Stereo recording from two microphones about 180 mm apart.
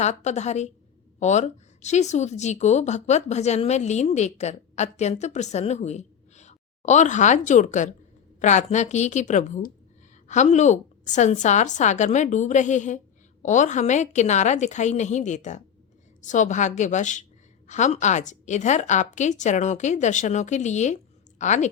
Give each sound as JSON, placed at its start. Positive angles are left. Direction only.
{"t": 0.0, "sound": "a woman's voice", "side_deg": 40}